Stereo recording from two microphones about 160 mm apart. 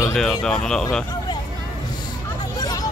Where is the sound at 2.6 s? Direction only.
25° left (ahead or behind).